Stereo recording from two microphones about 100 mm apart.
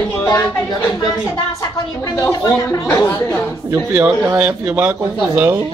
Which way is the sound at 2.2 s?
30° left (ahead or behind).